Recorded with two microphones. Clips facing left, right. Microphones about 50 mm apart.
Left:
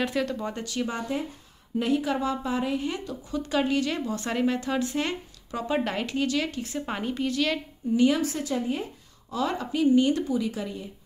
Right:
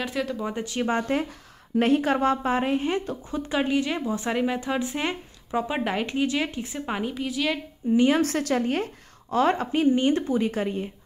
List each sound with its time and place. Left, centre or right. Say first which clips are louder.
0.0 s speech: left 1 dB; centre
0.7 s a woman's voice: right 7 dB; right
1.8 s speech: right 4 dB; right; by 6.8 s centre
6.9 s a woman's voice: even; centre
7.9 s a woman's voice: right 2 dB; right
8.2 s a woman's voice: right 4 dB; right
9.4 s a woman's voice: right 4 dB; right